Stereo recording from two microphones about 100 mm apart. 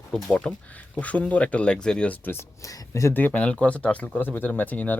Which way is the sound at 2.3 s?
30° left (ahead or behind).